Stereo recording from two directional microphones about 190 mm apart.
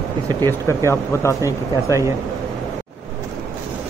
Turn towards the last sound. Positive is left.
turn(degrees=-15)  # may be behind; listen again after turning